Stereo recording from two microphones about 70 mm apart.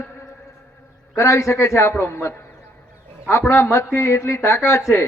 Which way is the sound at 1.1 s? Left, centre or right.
Left.